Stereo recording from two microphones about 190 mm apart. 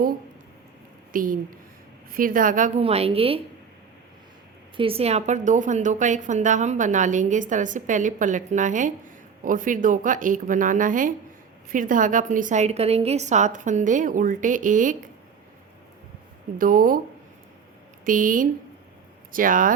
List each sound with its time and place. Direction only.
1.1 s a woman's voice: 45° right (ahead or behind); by 3.4 s 30° right (ahead or behind)
4.8 s a woman's voice: 30° right (ahead or behind)
16.6 s a woman's voice: 45° right (ahead or behind)
18.0 s a woman's voice: 45° right (ahead or behind)